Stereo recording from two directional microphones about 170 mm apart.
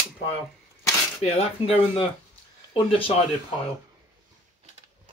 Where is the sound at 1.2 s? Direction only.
35° left (ahead or behind).